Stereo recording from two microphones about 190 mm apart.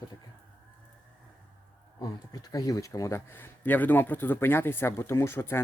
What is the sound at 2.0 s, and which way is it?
Speech, 20° left (ahead or behind).